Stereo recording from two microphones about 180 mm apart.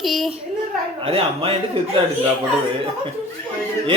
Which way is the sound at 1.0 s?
30° right (ahead or behind).